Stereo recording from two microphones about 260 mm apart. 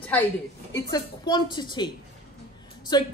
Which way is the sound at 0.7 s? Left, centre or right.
Centre.